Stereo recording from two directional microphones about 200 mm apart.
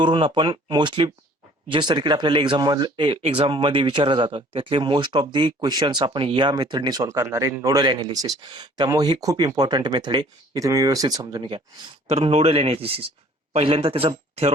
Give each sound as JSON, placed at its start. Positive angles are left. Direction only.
{"t": 0.0, "sound": "speech", "side_deg": -25}